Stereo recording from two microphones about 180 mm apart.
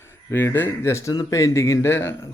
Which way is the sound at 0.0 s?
15° left (ahead or behind).